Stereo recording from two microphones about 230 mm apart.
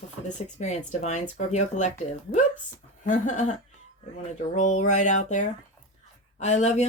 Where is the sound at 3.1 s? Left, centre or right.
Left.